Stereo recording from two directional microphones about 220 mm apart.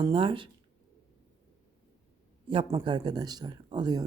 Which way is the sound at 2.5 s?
25° right (ahead or behind).